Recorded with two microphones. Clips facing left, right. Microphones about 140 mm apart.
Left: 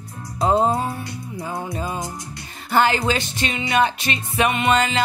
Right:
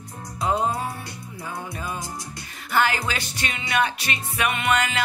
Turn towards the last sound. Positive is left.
turn(degrees=25)  # may be behind; listen again after turning